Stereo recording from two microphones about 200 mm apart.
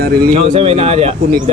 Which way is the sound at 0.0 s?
50° right (ahead or behind).